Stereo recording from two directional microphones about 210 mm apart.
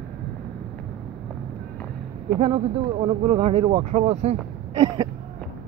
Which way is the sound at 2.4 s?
25° right (ahead or behind).